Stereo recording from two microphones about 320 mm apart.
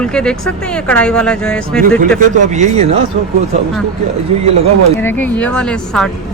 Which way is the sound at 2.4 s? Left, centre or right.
Right.